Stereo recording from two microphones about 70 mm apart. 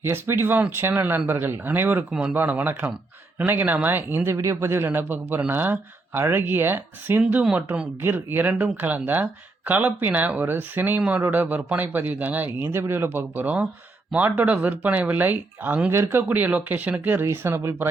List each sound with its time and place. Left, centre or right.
0.0 s speech: right
2.0 s speech: centre
2.3 s speech: right
4.4 s speech: right
8.0 s speech: right
15.9 s speech: right
16.3 s speech: right